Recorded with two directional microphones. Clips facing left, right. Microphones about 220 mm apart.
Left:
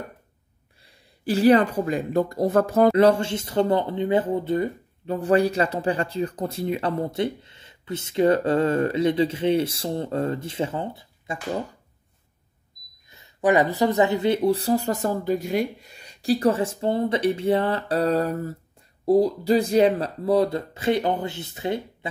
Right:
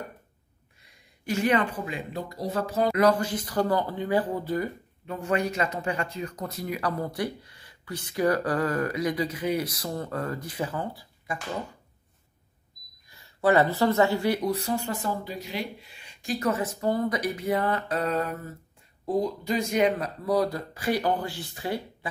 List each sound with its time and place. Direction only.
0.8 s speech: 30° left (ahead or behind); by 2.9 s 50° left (ahead or behind)
2.9 s speech: 30° left (ahead or behind)
13.1 s speech: 20° left (ahead or behind)